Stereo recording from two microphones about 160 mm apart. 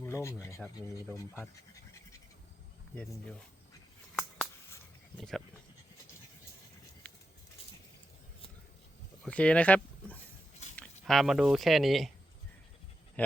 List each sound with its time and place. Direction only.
0.0 s speech: 15° left (ahead or behind)
2.9 s speech: 5° left (ahead or behind)
4.1 s a sound: centre (ahead or behind)
5.1 s speech: 5° left (ahead or behind)
9.2 s speech: 5° left (ahead or behind)
13.2 s speech: 10° left (ahead or behind)